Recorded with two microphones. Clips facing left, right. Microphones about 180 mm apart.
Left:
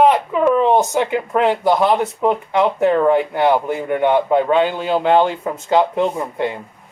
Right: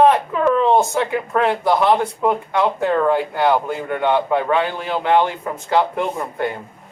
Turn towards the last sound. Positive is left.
turn(degrees=20)  # may be behind; listen again after turning